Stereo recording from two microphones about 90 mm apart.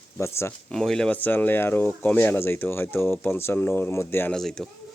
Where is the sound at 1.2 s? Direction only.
20° left (ahead or behind).